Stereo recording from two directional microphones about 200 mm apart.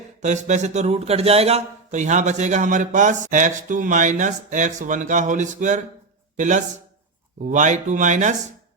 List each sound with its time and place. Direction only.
0.2 s speech: 35° right (ahead or behind)